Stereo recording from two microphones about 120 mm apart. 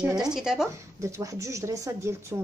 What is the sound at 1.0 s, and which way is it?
Speech, 25° right (ahead or behind).